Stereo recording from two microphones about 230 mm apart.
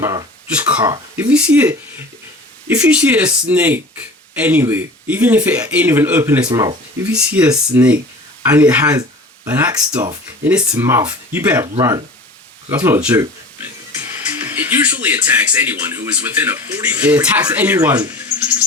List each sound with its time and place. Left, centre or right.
0.0 s speech: centre